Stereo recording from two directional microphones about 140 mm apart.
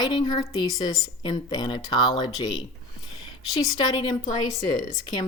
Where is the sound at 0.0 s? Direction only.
30° left (ahead or behind).